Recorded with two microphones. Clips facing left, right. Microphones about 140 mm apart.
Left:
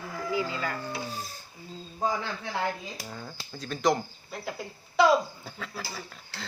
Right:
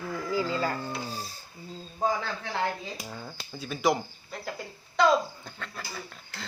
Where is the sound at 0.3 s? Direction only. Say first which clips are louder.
Right 3 dB; 35° right (ahead or behind).